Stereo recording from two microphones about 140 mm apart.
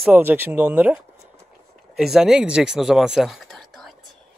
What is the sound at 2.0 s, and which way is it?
Speech, 5° right (ahead or behind).